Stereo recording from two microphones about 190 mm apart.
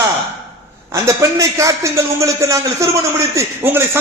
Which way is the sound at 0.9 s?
15° right (ahead or behind).